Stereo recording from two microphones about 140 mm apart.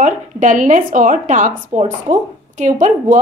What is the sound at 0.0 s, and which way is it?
A woman's voice, 65° right (ahead or behind).